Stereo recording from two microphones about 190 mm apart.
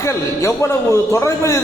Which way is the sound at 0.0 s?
15° left (ahead or behind).